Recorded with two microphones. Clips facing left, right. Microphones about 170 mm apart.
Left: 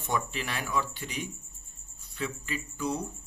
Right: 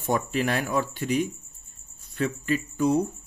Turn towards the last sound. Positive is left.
turn(degrees=-50)  # may be behind; listen again after turning